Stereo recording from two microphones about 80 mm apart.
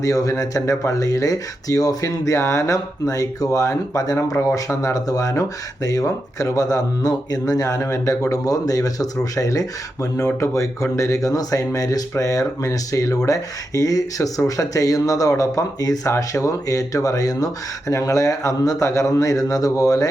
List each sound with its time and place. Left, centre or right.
0.0 s speech: left